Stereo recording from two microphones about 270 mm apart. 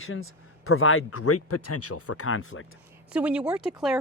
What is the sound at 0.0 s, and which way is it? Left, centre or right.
Speech, left.